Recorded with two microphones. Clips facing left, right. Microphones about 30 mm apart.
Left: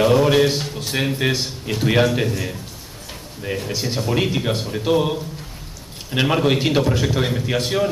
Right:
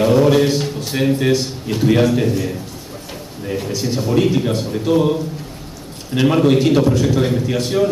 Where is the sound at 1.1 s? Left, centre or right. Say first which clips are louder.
Right 4 dB; centre.